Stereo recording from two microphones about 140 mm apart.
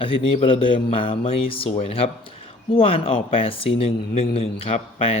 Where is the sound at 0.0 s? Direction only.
45° left (ahead or behind).